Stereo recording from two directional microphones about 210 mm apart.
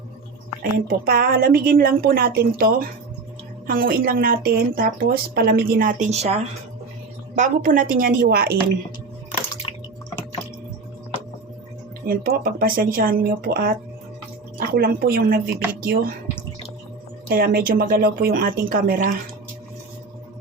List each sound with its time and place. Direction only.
0.6 s a woman's voice: 45° right (ahead or behind)
12.0 s a woman's voice: 45° right (ahead or behind)
17.2 s a woman's voice: 45° right (ahead or behind)